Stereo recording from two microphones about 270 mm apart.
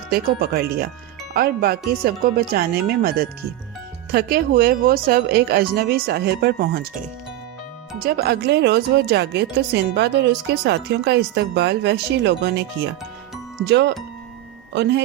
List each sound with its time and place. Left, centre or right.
0.1 s speech: right
7.9 s speech: right